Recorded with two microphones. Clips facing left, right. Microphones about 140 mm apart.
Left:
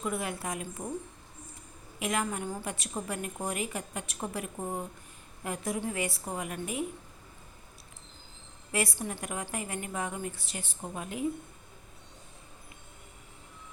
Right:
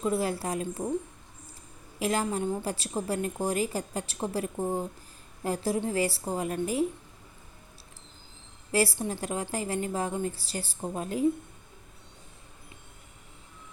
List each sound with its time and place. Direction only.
0.0 s a woman's voice: 30° right (ahead or behind)
2.0 s a woman's voice: 30° right (ahead or behind)
8.7 s a woman's voice: 30° right (ahead or behind)